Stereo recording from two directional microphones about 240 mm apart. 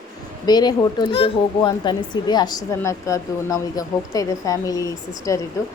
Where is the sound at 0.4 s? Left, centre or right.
Centre.